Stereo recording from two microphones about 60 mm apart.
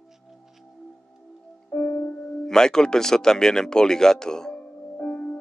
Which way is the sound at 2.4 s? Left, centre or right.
Centre.